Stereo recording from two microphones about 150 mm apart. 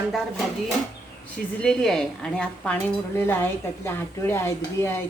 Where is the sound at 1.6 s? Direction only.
5° left (ahead or behind).